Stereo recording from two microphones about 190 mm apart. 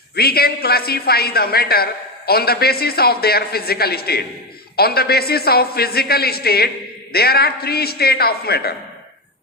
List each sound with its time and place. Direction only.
0.2 s a man's voice: 55° left (ahead or behind)